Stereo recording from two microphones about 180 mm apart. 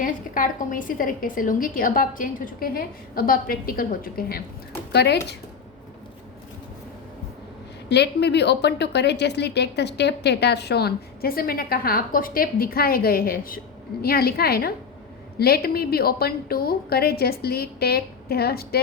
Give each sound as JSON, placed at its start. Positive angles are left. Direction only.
{"t": 0.0, "sound": "a woman's voice", "side_deg": 50}
{"t": 4.9, "sound": "speech", "side_deg": 70}
{"t": 7.9, "sound": "a woman's voice", "side_deg": 70}